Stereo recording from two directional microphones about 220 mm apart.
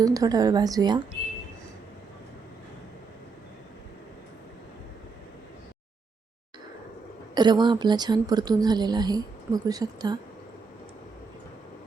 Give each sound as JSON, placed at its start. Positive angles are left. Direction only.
{"t": 0.0, "sound": "a woman's voice", "side_deg": -15}
{"t": 7.3, "sound": "a woman's voice", "side_deg": -20}